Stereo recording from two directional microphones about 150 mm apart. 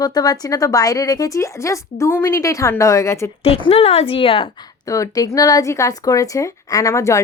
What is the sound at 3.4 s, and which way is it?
A woman's voice, 40° left (ahead or behind).